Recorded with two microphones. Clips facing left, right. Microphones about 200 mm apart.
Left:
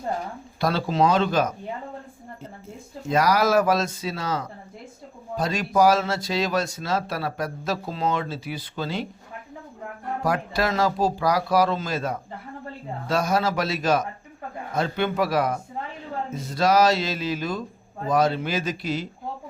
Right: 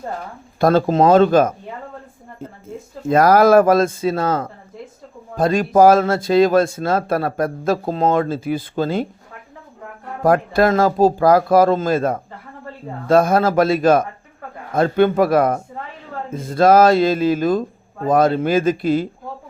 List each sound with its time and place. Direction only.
0.6 s speech: 45° right (ahead or behind)
3.1 s speech: 50° right (ahead or behind)
10.2 s speech: 50° right (ahead or behind)